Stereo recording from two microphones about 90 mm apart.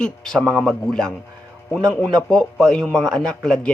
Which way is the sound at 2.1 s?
10° left (ahead or behind).